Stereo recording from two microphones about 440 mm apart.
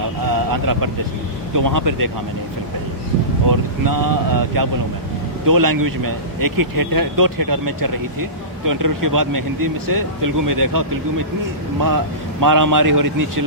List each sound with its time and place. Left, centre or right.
0.3 s vehicle: right
1.5 s a man's voice: right
3.5 s a man's voice: right